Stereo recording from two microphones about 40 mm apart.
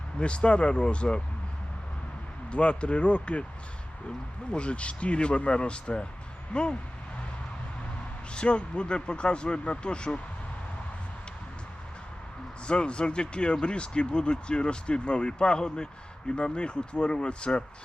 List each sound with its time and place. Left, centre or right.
0.2 s speech: left
2.5 s speech: left
4.5 s speech: left
8.3 s speech: left
12.6 s speech: left